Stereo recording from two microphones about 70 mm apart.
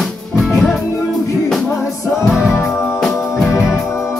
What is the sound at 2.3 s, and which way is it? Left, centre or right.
Music, centre.